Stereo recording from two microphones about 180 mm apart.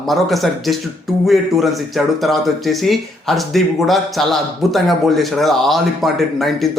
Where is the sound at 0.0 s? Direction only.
Centre (ahead or behind).